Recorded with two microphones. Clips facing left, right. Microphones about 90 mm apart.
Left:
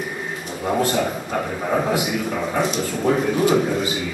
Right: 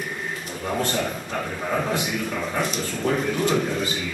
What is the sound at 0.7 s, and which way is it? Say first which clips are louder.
A man's voice: left 5 dB; 10° left (ahead or behind).